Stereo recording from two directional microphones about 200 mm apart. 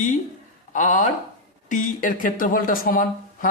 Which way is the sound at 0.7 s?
40° left (ahead or behind).